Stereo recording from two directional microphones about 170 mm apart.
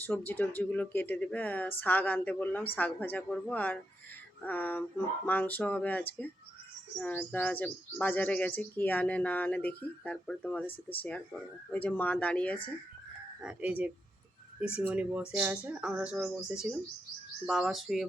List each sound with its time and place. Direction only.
0.0 s speech: 10° left (ahead or behind)
10.7 s speech: 35° left (ahead or behind)
11.0 s speech: 10° left (ahead or behind)
13.4 s speech: 10° right (ahead or behind)